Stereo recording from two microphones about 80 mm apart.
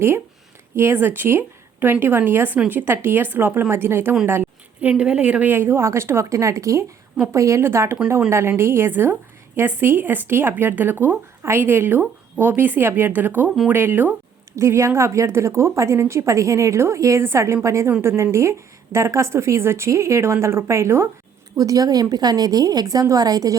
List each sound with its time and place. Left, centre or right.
0.8 s speech: right
4.8 s a woman's voice: centre
14.5 s a woman's voice: right
21.5 s a woman's voice: right